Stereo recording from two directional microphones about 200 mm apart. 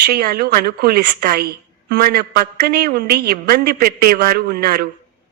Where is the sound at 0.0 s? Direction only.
50° right (ahead or behind).